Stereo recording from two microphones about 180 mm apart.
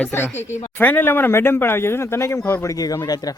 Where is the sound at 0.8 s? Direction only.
10° left (ahead or behind).